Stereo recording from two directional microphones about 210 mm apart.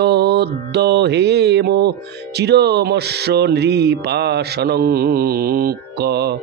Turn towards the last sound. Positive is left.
turn(degrees=-50)  # may be behind; listen again after turning